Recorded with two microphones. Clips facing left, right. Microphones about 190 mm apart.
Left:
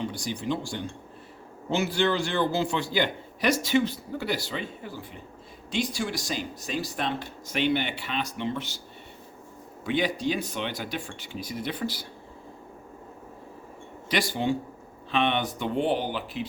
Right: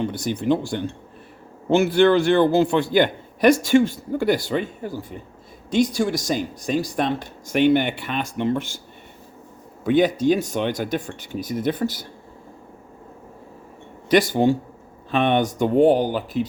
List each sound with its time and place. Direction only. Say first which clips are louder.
0.0 s a man's voice: right 7 dB; 60° right (ahead or behind)
9.8 s a man's voice: right 9 dB; 50° right (ahead or behind)
14.4 s a man's voice: right 8 dB; 50° right (ahead or behind)